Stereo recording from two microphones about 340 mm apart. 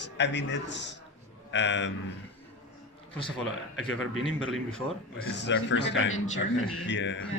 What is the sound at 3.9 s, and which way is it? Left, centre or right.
Speech, left.